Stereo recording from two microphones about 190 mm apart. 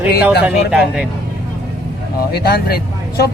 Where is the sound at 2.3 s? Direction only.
55° left (ahead or behind).